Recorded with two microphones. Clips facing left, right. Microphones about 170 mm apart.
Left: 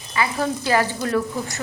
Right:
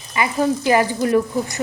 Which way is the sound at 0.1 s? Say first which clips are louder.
Right 4 dB; 15° right (ahead or behind).